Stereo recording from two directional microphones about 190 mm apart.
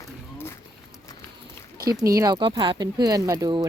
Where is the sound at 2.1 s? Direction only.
20° right (ahead or behind).